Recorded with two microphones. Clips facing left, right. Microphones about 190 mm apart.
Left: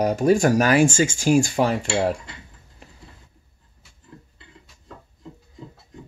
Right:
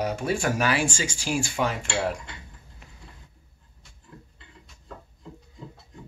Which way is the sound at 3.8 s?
5° left (ahead or behind).